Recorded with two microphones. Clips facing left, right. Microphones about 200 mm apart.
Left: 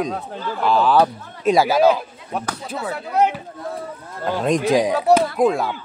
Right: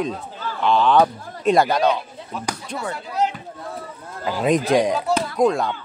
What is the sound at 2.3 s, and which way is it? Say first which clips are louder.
Speech: left 5 dB; 65° left (ahead or behind).